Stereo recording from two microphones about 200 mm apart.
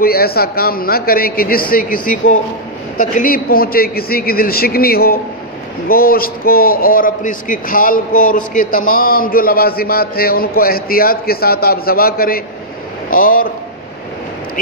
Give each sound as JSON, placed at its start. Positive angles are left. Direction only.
{"t": 0.0, "sound": "a man's voice", "side_deg": 50}